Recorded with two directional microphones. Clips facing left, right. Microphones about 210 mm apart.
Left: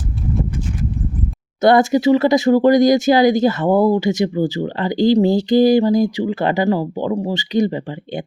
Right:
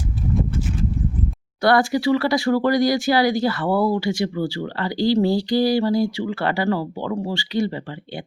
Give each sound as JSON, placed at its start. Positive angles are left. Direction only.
{"t": 1.6, "sound": "speech", "side_deg": 20}